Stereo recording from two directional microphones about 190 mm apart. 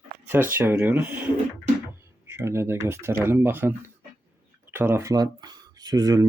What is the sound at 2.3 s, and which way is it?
Speech, 15° right (ahead or behind).